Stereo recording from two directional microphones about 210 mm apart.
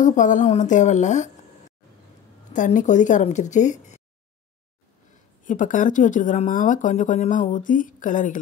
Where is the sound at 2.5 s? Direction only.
35° left (ahead or behind).